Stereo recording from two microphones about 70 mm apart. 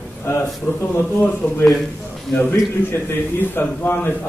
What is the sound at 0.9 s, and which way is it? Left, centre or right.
A man's voice, left.